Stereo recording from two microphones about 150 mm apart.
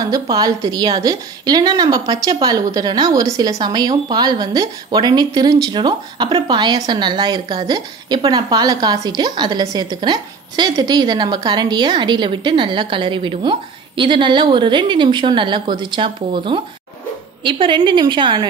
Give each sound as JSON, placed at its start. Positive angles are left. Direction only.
{"t": 0.0, "sound": "a woman's voice", "side_deg": -25}